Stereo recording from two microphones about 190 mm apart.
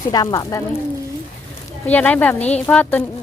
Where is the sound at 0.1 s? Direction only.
20° left (ahead or behind).